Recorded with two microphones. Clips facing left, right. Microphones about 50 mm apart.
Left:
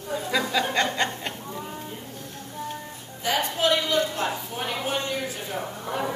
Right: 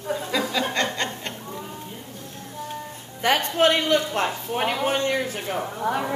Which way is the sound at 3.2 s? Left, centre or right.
Right.